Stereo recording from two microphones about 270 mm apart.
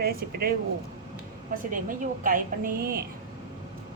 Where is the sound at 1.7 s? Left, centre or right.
Right.